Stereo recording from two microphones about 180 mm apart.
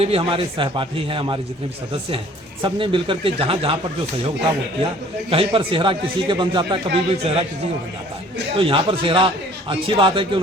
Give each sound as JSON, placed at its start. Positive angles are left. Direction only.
{"t": 0.0, "sound": "a man's voice", "side_deg": -30}
{"t": 5.3, "sound": "a man's voice", "side_deg": -30}
{"t": 8.5, "sound": "a man's voice", "side_deg": -30}